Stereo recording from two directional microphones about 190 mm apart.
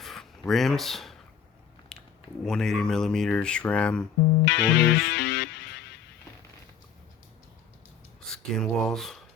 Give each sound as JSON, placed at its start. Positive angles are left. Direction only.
{"t": 0.0, "sound": "a sound", "side_deg": 0}
{"t": 2.4, "sound": "speech", "side_deg": 0}
{"t": 4.4, "sound": "music", "side_deg": 60}
{"t": 8.3, "sound": "speech", "side_deg": 5}